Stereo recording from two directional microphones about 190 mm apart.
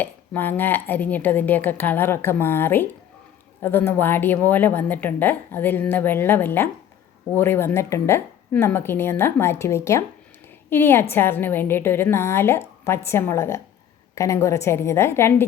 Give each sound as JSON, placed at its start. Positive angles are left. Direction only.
{"t": 0.0, "sound": "a woman's voice", "side_deg": 10}